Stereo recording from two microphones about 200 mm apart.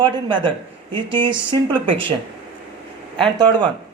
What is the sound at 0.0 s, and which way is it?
A man's voice, 25° right (ahead or behind).